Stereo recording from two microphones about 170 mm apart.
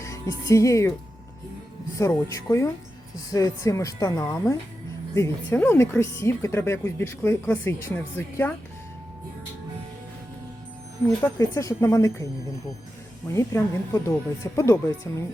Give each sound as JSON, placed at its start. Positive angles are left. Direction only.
{"t": 0.0, "sound": "a woman's voice", "side_deg": 20}
{"t": 2.3, "sound": "a woman's voice", "side_deg": 15}
{"t": 11.2, "sound": "speech", "side_deg": 20}
{"t": 13.3, "sound": "speech", "side_deg": 15}